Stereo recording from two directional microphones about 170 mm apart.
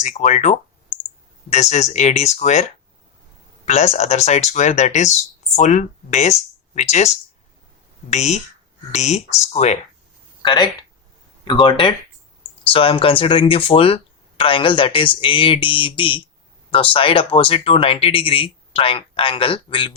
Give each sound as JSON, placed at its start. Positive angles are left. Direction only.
{"t": 0.0, "sound": "speech", "side_deg": 45}
{"t": 3.7, "sound": "speech", "side_deg": 40}
{"t": 8.1, "sound": "speech", "side_deg": 40}
{"t": 10.4, "sound": "speech", "side_deg": 25}